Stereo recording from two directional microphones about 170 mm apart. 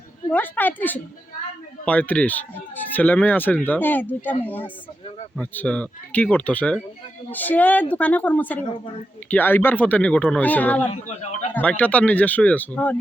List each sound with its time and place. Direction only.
0.3 s a child's voice: 10° left (ahead or behind)
10.9 s a man's voice: 40° left (ahead or behind)
11.5 s a child's voice: 10° left (ahead or behind)